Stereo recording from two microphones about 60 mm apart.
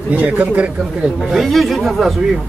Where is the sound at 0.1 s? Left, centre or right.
Right.